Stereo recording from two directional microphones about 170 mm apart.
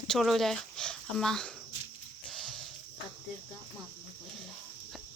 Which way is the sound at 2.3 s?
Centre (ahead or behind).